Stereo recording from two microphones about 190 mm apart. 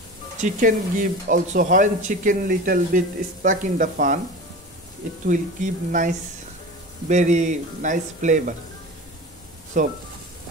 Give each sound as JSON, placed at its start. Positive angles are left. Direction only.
{"t": 0.4, "sound": "speech", "side_deg": -45}
{"t": 5.2, "sound": "speech", "side_deg": -40}
{"t": 9.8, "sound": "speech", "side_deg": -40}